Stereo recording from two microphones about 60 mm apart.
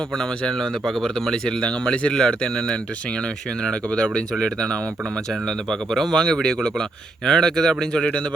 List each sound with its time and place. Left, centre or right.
0.2 s speech: centre